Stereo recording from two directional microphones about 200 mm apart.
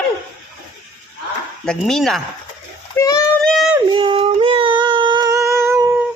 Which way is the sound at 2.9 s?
15° left (ahead or behind).